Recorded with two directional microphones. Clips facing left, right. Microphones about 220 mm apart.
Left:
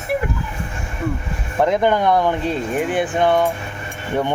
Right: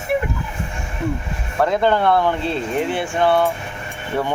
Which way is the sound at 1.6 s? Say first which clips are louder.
Left 1 dB; 15° left (ahead or behind).